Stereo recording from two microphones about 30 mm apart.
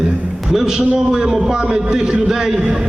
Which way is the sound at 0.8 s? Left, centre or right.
Right.